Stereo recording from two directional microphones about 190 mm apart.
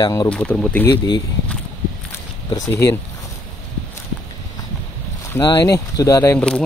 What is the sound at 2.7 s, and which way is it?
Speech, 15° left (ahead or behind).